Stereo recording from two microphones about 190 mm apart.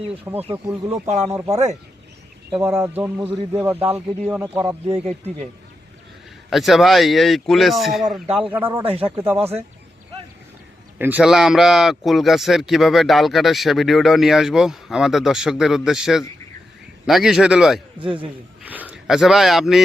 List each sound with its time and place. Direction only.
0.3 s speech: 10° right (ahead or behind)
1.5 s speech: 35° right (ahead or behind)
2.5 s speech: 10° right (ahead or behind)
6.5 s speech: centre (ahead or behind)
10.9 s speech: 10° right (ahead or behind)
18.0 s a man's voice: 25° right (ahead or behind)
18.6 s speech: 10° right (ahead or behind)